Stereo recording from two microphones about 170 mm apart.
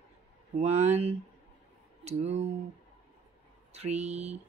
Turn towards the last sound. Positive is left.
turn(degrees=-40)  # may be behind; listen again after turning